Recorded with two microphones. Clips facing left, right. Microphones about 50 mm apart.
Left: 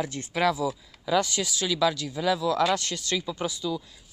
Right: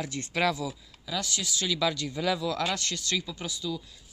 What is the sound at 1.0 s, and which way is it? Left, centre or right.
Speech, centre.